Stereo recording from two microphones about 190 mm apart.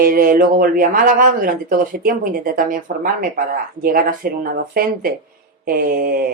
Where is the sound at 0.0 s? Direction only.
45° right (ahead or behind).